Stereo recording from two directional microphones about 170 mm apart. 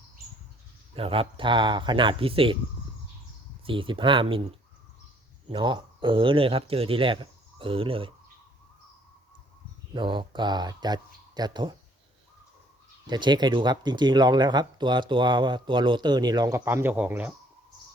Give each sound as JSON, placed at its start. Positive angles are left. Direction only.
{"t": 0.9, "sound": "speech", "side_deg": -35}
{"t": 3.7, "sound": "speech", "side_deg": -30}
{"t": 9.9, "sound": "speech", "side_deg": -30}
{"t": 13.1, "sound": "speech", "side_deg": -25}